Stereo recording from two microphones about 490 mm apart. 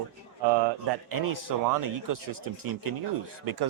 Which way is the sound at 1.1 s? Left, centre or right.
Right.